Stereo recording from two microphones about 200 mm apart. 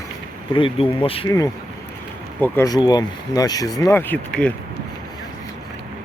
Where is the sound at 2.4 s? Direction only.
15° left (ahead or behind).